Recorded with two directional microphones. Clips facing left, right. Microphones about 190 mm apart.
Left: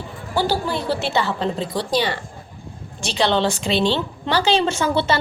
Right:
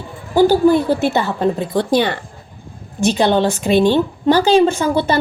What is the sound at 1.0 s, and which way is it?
A woman's voice, 50° right (ahead or behind).